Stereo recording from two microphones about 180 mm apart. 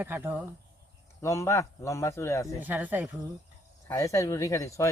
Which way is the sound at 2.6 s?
10° right (ahead or behind).